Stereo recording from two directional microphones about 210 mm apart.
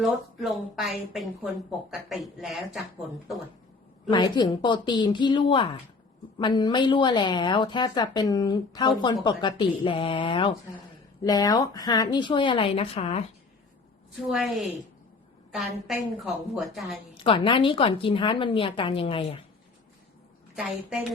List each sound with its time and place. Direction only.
0.0 s a woman's voice: centre (ahead or behind)
2.4 s a woman's voice: centre (ahead or behind)
4.1 s a woman's voice: 20° left (ahead or behind)
14.3 s a woman's voice: centre (ahead or behind)
17.2 s a woman's voice: 25° left (ahead or behind)
20.6 s a woman's voice: 5° right (ahead or behind)